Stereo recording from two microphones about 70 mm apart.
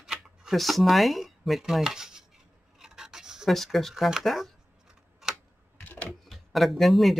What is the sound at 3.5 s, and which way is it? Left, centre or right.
Speech, centre.